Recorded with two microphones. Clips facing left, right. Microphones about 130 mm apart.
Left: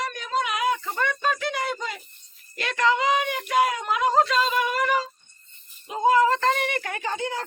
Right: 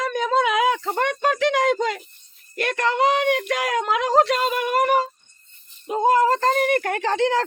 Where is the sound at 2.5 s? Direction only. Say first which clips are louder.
Right 1 dB; 55° right (ahead or behind).